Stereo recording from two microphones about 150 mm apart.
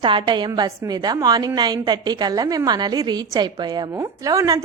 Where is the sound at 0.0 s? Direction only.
35° right (ahead or behind).